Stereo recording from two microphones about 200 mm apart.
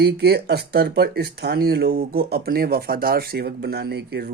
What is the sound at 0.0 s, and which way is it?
Speech, 55° right (ahead or behind).